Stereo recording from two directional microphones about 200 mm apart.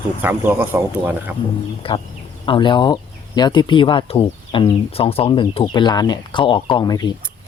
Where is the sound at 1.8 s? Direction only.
25° left (ahead or behind).